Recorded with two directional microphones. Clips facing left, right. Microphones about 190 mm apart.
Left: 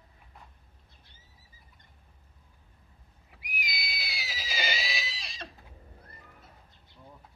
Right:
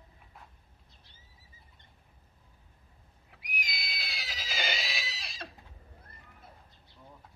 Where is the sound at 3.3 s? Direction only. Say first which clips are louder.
Left 2 dB; 5° left (ahead or behind).